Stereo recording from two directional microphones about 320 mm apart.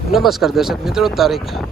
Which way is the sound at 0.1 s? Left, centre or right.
Centre.